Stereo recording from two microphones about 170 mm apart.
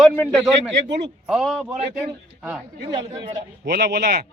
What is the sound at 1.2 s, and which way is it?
Speech, centre (ahead or behind).